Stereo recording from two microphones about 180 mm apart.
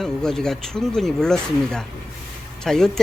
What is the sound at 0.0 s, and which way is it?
Speech, centre (ahead or behind).